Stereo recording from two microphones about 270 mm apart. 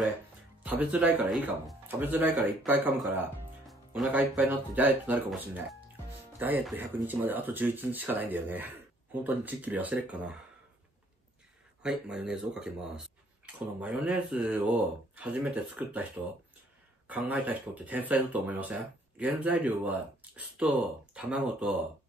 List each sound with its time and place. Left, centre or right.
0.7 s speech: centre
11.8 s speech: centre
17.3 s speech: centre